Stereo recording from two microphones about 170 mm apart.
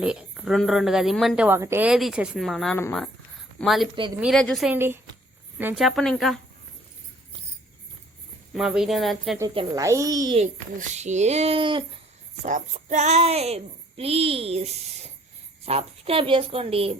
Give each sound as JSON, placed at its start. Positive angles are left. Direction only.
{"t": 0.0, "sound": "speech", "side_deg": -5}
{"t": 1.4, "sound": "speech", "side_deg": -15}
{"t": 1.9, "sound": "speech", "side_deg": 0}
{"t": 4.7, "sound": "speech", "side_deg": -15}
{"t": 5.7, "sound": "speech", "side_deg": 0}
{"t": 8.5, "sound": "speech", "side_deg": 0}
{"t": 9.7, "sound": "a child's voice", "side_deg": -20}
{"t": 10.3, "sound": "speech", "side_deg": -40}
{"t": 12.5, "sound": "speech", "side_deg": -45}